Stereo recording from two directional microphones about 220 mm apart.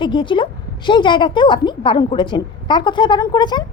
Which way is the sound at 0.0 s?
20° left (ahead or behind).